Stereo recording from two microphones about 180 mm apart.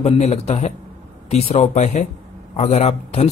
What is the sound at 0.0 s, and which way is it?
A man's voice, 40° left (ahead or behind).